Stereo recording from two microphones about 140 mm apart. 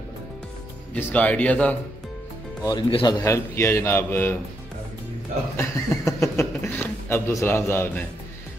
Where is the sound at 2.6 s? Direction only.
35° left (ahead or behind); by 4.4 s 15° left (ahead or behind).